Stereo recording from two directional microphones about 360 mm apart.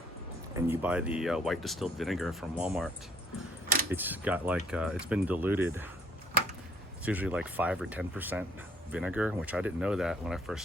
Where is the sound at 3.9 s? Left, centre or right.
Centre.